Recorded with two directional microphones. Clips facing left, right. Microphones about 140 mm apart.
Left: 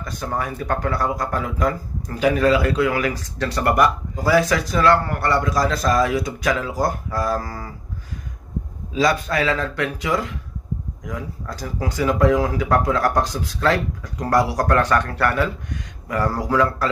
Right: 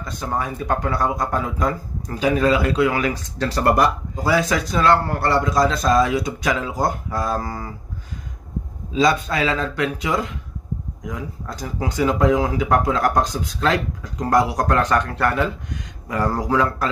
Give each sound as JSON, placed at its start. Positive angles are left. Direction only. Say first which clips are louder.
{"t": 0.2, "sound": "speech", "louder": "right 1 dB", "side_deg": -20}
{"t": 8.9, "sound": "speech", "louder": "right 1 dB", "side_deg": -20}